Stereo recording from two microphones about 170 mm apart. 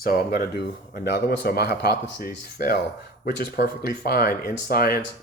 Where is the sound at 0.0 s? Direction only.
60° left (ahead or behind).